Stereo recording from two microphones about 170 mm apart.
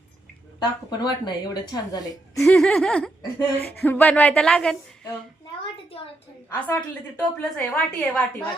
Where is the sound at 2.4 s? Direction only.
5° left (ahead or behind).